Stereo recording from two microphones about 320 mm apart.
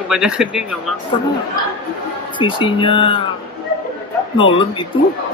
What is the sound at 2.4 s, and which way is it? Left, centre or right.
Speech, centre.